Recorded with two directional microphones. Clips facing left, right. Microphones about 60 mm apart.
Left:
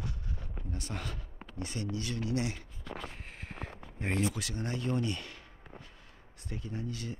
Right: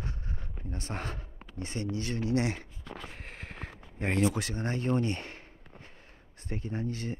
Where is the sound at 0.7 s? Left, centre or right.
Right.